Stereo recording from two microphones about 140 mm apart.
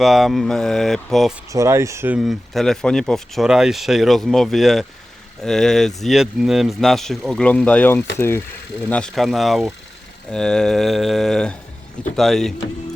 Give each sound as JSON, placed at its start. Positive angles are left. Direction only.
{"t": 0.0, "sound": "speech", "side_deg": 0}
{"t": 1.5, "sound": "speech", "side_deg": -20}
{"t": 2.1, "sound": "speech", "side_deg": 0}